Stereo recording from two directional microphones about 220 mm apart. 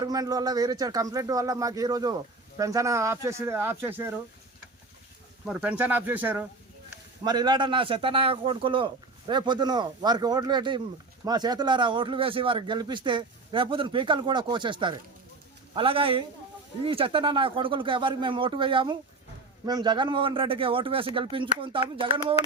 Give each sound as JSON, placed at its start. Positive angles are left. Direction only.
{"t": 0.0, "sound": "speech", "side_deg": -15}
{"t": 5.5, "sound": "speech", "side_deg": -5}
{"t": 7.3, "sound": "speech", "side_deg": -20}